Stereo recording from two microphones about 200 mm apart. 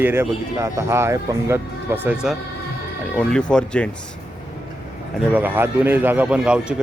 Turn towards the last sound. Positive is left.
turn(degrees=-5)  # may be behind; listen again after turning